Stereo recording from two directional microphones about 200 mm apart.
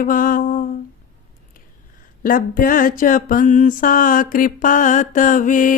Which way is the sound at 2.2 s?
45° left (ahead or behind).